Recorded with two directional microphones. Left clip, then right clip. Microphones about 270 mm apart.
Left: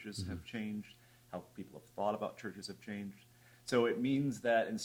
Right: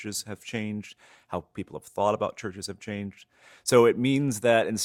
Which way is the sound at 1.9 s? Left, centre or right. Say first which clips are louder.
Right 11 dB; right.